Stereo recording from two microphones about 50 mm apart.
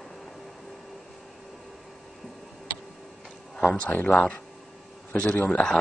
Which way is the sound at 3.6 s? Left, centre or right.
Left.